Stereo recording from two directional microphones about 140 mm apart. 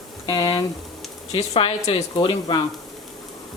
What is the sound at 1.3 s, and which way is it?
Speech, 45° left (ahead or behind).